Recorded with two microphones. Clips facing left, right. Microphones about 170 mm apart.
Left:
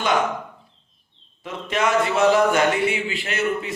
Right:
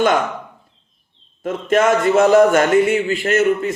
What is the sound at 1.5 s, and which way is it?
A man's voice, 45° right (ahead or behind).